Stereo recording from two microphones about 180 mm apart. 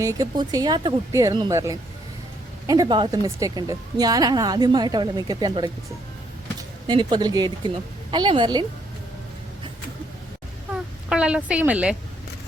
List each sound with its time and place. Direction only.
0.0 s a woman's voice: 20° right (ahead or behind)
6.8 s a woman's voice: 25° right (ahead or behind)
11.1 s a woman's voice: 5° right (ahead or behind)